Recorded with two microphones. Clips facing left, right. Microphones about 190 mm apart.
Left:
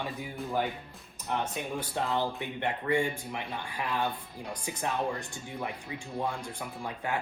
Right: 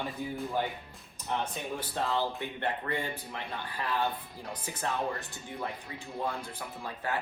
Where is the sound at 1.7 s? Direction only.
15° left (ahead or behind).